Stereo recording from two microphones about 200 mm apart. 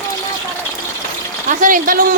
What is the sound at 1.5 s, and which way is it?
Speech, 40° right (ahead or behind).